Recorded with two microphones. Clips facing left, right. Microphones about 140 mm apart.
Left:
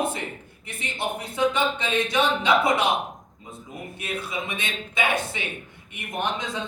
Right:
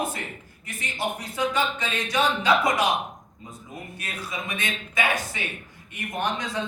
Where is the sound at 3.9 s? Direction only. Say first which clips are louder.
Left 5 dB; 25° left (ahead or behind).